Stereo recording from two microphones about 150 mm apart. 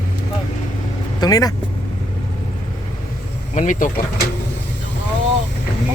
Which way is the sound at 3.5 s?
55° left (ahead or behind).